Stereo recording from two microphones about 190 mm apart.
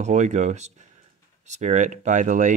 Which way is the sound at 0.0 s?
40° right (ahead or behind).